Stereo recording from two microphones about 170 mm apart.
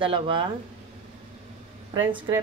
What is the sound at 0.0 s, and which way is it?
Speech, 30° right (ahead or behind).